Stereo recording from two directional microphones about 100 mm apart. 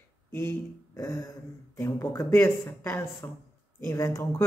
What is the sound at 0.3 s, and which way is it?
Speech, 20° left (ahead or behind).